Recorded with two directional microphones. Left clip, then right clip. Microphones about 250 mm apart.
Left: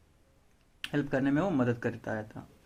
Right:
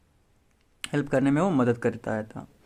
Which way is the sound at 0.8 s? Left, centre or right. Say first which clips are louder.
Right 5 dB; right.